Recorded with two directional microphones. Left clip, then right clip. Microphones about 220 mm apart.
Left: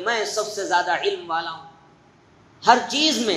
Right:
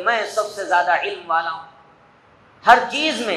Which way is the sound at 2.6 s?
70° left (ahead or behind).